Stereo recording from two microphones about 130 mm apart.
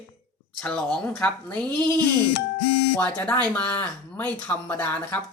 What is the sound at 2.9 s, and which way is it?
Speech, 15° left (ahead or behind).